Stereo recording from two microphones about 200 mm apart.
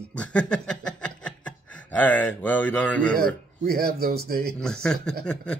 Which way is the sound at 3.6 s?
50° right (ahead or behind).